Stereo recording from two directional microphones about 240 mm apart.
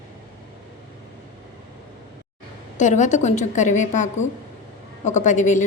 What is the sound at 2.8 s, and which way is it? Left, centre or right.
A woman's voice, left.